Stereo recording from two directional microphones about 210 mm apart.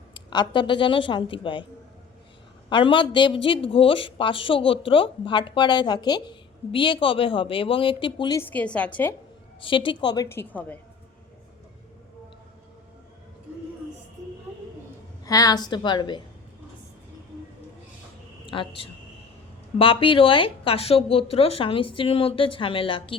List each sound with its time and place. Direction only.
0.1 s speech: 20° left (ahead or behind)
2.6 s speech: 25° left (ahead or behind)
8.4 s a woman's voice: 10° left (ahead or behind)
9.6 s speech: 25° left (ahead or behind); by 10.8 s 5° left (ahead or behind)
15.2 s speech: 15° left (ahead or behind)
18.4 s speech: 25° left (ahead or behind)